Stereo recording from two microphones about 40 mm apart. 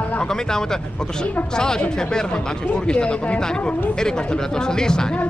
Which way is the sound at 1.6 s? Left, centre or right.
Centre.